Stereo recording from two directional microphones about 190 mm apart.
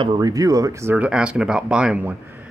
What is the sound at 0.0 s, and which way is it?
Speech, 25° right (ahead or behind).